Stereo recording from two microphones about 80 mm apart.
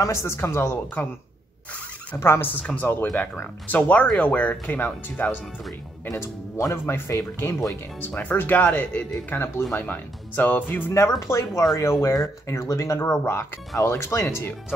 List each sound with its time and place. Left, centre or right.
0.0 s speech: left
2.1 s speech: left
2.6 s speech: centre
6.1 s speech: left
10.9 s speech: left